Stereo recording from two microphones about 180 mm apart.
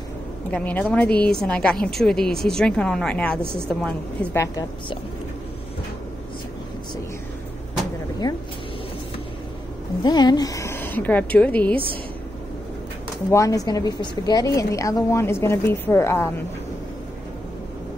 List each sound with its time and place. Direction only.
0.5 s a woman's voice: 10° left (ahead or behind)
10.0 s a woman's voice: 25° left (ahead or behind); by 11.7 s 10° left (ahead or behind)
13.3 s a woman's voice: 20° left (ahead or behind)